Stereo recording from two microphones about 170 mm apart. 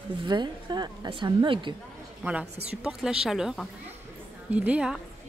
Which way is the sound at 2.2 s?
5° right (ahead or behind).